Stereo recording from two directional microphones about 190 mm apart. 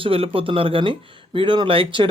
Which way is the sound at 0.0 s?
30° right (ahead or behind).